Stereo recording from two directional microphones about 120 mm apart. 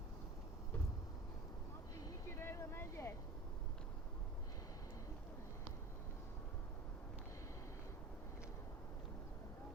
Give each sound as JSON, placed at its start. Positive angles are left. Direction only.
{"t": 2.0, "sound": "vehicle", "side_deg": 25}